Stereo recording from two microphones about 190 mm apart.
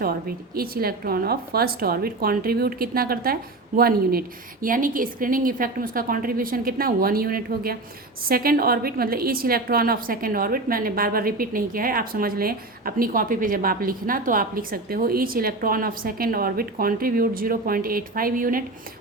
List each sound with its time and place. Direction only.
0.0 s a woman's voice: 50° right (ahead or behind)